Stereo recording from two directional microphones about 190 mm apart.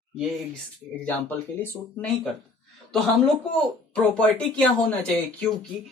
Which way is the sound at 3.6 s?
5° left (ahead or behind).